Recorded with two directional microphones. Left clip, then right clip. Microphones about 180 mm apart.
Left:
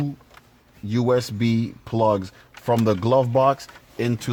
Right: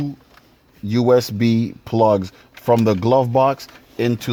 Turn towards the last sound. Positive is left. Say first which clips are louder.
# right 5 dB
turn(degrees=-40)  # may be behind; listen again after turning